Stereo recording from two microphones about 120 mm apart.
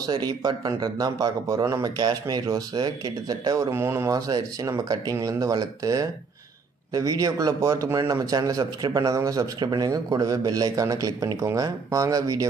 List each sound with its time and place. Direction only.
0.0 s a man's voice: 35° right (ahead or behind)